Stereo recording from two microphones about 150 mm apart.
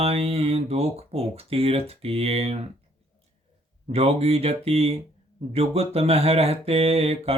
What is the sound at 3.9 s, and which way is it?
Speech, 45° right (ahead or behind).